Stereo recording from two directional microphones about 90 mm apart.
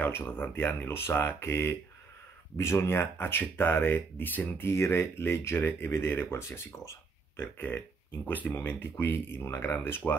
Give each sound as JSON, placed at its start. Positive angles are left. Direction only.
{"t": 0.0, "sound": "speech", "side_deg": 20}